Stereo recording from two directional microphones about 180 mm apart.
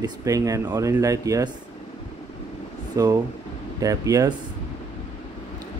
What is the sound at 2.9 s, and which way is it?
Speech, 20° right (ahead or behind).